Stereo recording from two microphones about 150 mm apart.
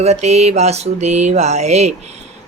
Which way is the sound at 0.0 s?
45° right (ahead or behind).